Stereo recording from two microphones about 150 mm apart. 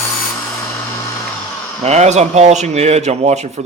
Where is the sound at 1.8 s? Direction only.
50° right (ahead or behind).